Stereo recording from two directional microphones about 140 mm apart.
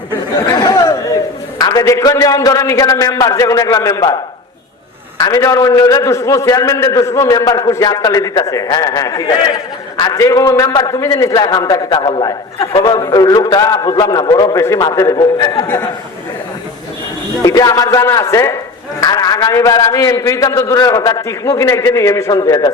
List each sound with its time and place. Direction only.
0.5 s chatter: 25° left (ahead or behind)
1.5 s a man's voice: 25° left (ahead or behind)
17.4 s a man's voice: 25° left (ahead or behind)